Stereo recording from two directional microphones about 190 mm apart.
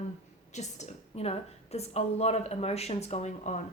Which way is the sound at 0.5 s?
35° left (ahead or behind).